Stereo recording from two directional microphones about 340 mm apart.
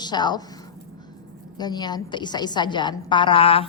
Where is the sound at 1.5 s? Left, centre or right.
Centre.